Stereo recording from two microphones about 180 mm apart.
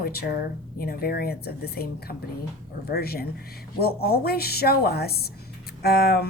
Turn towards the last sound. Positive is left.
turn(degrees=60)  # may be behind; listen again after turning